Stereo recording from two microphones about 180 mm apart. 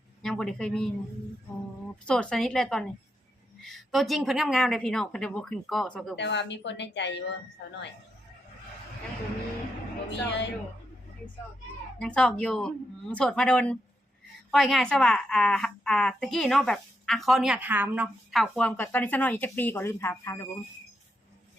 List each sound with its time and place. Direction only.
0.2 s a woman's voice: 5° left (ahead or behind)
2.0 s a woman's voice: 5° left (ahead or behind)
6.1 s a woman's voice: 80° left
10.1 s a woman's voice: 75° left (ahead or behind)
11.9 s a woman's voice: 5° left (ahead or behind)